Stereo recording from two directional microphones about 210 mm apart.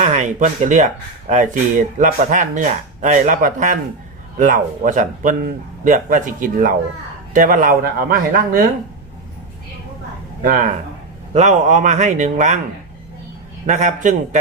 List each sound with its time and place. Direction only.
0.0 s speech: 35° right (ahead or behind)
10.4 s speech: 40° right (ahead or behind)
13.7 s speech: 35° right (ahead or behind)